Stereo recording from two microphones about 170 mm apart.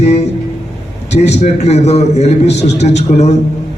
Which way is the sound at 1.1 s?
40° left (ahead or behind).